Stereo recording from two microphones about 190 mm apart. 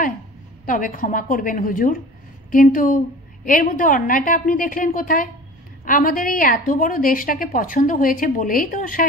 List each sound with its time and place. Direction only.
0.7 s a woman's voice: 45° left (ahead or behind)